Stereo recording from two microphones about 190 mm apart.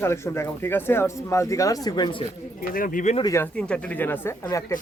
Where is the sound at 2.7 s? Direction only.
45° left (ahead or behind).